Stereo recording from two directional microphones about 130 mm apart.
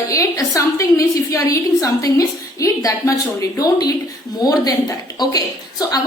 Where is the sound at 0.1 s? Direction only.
25° left (ahead or behind).